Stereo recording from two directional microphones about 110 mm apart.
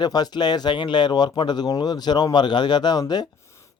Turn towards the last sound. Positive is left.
turn(degrees=40)  # may be behind; listen again after turning